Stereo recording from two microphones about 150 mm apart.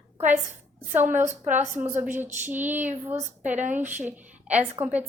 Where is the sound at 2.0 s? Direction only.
55° right (ahead or behind).